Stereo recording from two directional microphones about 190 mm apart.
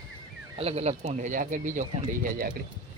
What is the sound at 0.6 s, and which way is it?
Speech, 35° right (ahead or behind).